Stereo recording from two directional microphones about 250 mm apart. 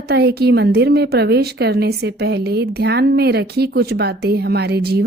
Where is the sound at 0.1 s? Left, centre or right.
Right.